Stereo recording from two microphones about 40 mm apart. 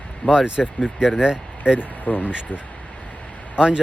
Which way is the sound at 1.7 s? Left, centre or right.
Left.